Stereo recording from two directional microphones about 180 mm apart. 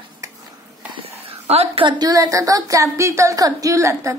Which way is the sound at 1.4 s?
35° right (ahead or behind).